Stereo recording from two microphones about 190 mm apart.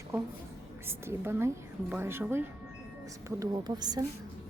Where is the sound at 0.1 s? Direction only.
15° right (ahead or behind).